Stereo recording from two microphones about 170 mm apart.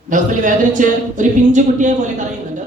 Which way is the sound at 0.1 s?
50° right (ahead or behind).